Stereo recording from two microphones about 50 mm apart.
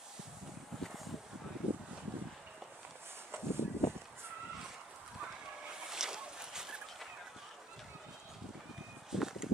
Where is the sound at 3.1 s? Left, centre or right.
Right.